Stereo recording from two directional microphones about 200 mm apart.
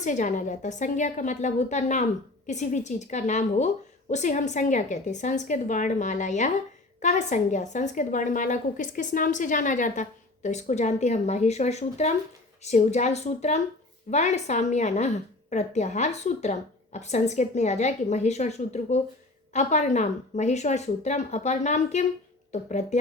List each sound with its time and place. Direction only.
0.0 s a woman's voice: 40° left (ahead or behind)